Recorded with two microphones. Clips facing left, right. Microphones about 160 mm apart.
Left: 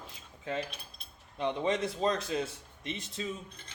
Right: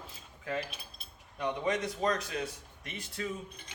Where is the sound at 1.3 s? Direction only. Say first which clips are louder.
Left 2 dB; 25° left (ahead or behind).